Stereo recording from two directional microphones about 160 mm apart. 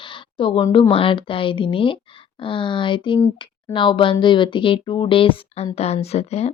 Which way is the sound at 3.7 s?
30° left (ahead or behind).